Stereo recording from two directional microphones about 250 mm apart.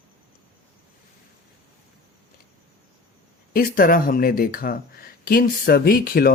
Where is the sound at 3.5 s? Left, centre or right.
Left.